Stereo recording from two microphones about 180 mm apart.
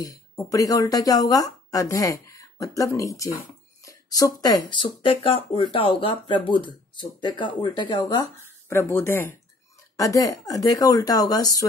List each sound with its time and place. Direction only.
0.0 s speech: 20° left (ahead or behind)
8.6 s speech: 15° left (ahead or behind)